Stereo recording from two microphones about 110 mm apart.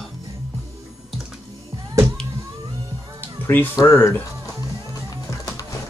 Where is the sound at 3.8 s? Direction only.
25° left (ahead or behind).